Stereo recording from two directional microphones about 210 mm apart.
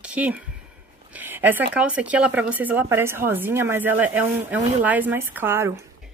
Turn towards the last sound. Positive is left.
turn(degrees=-10)  # may be behind; listen again after turning